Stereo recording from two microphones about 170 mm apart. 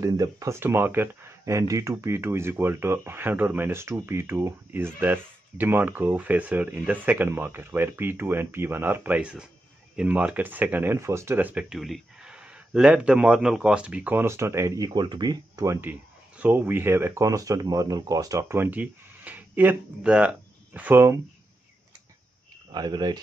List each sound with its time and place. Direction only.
0.0 s speech: 20° right (ahead or behind)
22.7 s speech: 25° right (ahead or behind)